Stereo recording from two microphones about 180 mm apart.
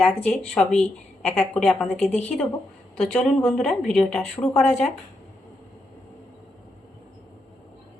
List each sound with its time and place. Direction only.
0.0 s speech: 5° left (ahead or behind)